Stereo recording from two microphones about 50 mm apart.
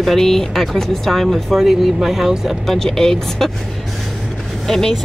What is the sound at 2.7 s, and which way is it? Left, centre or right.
Speech, centre.